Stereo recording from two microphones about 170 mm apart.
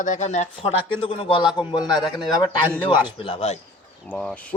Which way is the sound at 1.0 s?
30° left (ahead or behind).